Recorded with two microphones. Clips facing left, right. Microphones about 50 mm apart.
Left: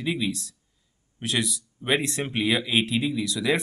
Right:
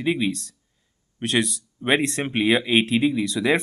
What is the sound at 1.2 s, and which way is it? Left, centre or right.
Speech, right.